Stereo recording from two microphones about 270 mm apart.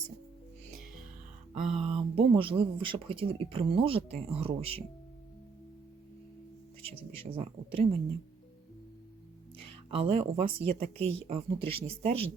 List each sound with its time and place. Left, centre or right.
1.7 s speech: right
7.2 s speech: right
9.6 s speech: right